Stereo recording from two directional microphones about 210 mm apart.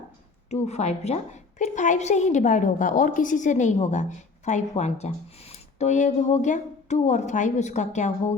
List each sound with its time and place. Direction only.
0.5 s speech: 30° left (ahead or behind)